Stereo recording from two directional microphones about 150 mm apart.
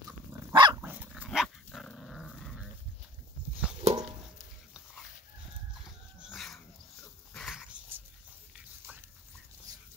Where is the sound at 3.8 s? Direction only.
45° right (ahead or behind).